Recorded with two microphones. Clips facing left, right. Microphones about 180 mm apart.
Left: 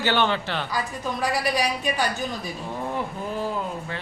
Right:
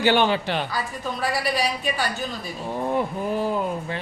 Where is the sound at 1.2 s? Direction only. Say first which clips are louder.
Even; 15° left (ahead or behind).